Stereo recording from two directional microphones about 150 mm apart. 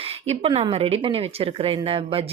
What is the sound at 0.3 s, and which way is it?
Speech, 40° right (ahead or behind).